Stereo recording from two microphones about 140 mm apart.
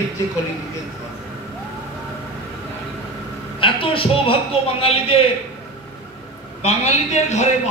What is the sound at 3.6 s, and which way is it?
A man's voice, 40° left (ahead or behind).